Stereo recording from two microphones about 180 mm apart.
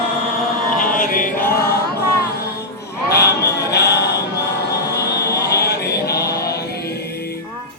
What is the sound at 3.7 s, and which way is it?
Music, 65° left (ahead or behind).